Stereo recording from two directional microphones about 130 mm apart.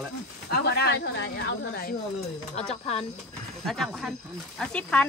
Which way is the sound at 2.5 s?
50° left (ahead or behind).